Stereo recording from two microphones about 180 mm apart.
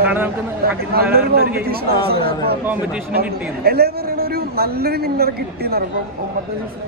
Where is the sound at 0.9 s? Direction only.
60° right (ahead or behind).